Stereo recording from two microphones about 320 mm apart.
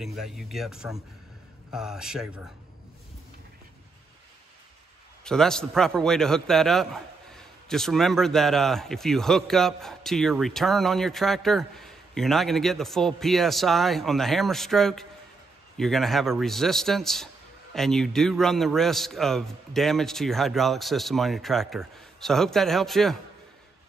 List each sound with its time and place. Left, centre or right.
0.0 s a man's voice: centre
5.2 s a man's voice: centre